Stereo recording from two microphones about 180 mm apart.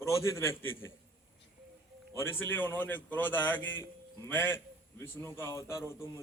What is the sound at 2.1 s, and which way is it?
A man's voice, 15° left (ahead or behind).